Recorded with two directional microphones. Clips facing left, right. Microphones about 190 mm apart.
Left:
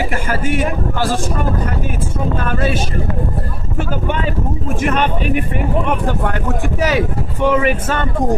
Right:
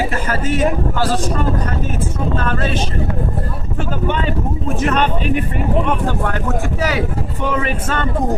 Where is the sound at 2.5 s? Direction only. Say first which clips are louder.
Left 2 dB; 10° left (ahead or behind).